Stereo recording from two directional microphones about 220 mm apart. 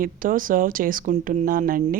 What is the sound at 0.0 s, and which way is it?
Speech, 40° right (ahead or behind).